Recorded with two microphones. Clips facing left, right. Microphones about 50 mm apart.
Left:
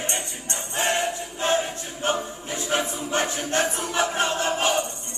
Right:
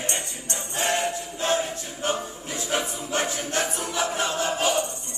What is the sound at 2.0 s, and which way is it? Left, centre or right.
Choir, left.